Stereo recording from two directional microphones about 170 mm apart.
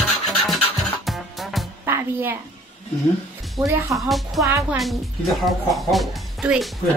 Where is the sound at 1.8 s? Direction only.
15° right (ahead or behind).